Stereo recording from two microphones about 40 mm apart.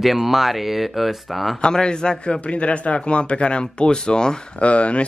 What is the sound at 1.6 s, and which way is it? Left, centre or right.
A man's voice, left.